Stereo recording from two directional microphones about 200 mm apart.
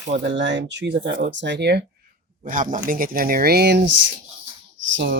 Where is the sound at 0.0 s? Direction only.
60° right (ahead or behind).